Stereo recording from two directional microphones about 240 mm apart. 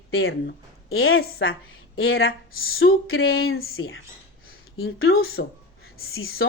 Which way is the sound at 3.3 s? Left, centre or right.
Left.